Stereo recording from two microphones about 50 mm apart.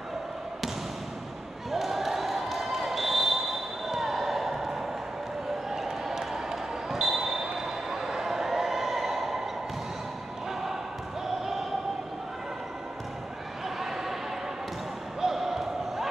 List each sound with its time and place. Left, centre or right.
1.7 s basketball bounce: centre
5.7 s basketball bounce: centre
13.7 s a sound: centre
15.1 s basketball bounce: centre